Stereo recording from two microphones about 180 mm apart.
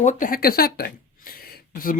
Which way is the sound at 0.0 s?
45° left (ahead or behind).